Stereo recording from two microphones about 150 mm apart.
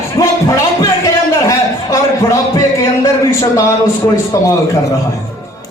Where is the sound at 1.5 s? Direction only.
20° left (ahead or behind).